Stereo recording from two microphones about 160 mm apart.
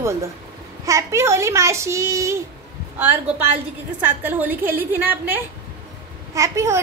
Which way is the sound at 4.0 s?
10° right (ahead or behind).